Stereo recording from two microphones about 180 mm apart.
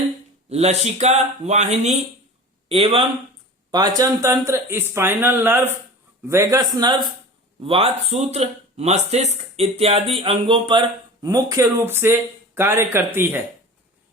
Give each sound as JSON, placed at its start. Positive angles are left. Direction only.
{"t": 0.5, "sound": "speech", "side_deg": -35}
{"t": 7.6, "sound": "speech", "side_deg": -30}